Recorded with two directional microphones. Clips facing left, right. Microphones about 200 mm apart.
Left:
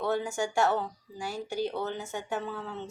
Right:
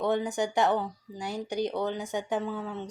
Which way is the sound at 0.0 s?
20° right (ahead or behind).